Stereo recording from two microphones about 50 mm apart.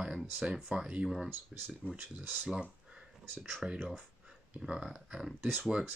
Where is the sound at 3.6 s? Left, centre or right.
Centre.